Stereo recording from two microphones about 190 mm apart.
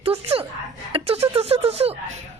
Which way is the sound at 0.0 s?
30° right (ahead or behind).